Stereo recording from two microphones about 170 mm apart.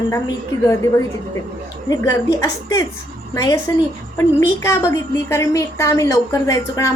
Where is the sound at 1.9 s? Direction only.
20° left (ahead or behind).